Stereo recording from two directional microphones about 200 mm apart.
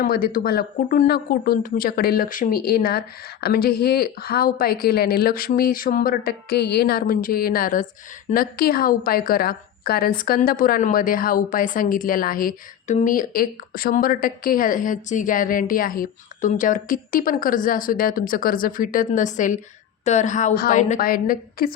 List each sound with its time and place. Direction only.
0.0 s a woman's voice: 45° left (ahead or behind)